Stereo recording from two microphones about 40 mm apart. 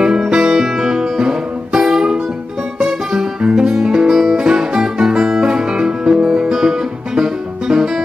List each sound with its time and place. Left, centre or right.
0.3 s music: centre